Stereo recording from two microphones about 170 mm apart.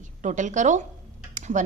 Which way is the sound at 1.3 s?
45° right (ahead or behind).